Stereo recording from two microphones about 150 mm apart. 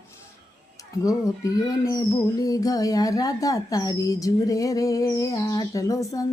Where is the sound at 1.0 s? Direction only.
20° left (ahead or behind).